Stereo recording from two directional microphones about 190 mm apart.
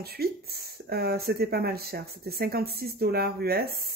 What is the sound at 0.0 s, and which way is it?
Speech, 55° right (ahead or behind).